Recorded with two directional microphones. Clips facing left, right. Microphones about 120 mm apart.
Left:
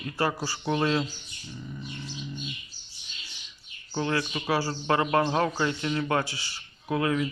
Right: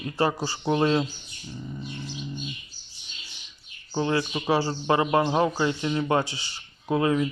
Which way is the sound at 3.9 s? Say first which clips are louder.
Right 3 dB; 25° right (ahead or behind).